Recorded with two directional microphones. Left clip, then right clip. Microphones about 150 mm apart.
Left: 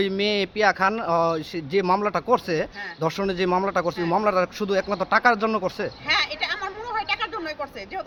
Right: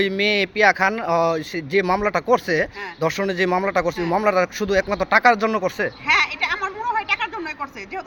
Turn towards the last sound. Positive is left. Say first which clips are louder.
# right 3 dB
turn(degrees=30)  # may be behind; listen again after turning